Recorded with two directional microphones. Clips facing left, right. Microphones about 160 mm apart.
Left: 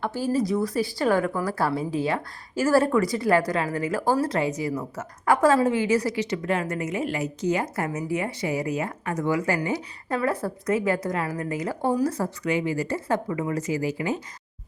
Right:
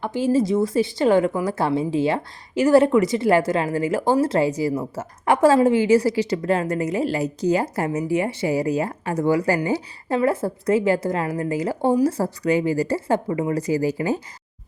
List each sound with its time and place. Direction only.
0.0 s a woman's voice: 20° right (ahead or behind); by 14.2 s 35° right (ahead or behind)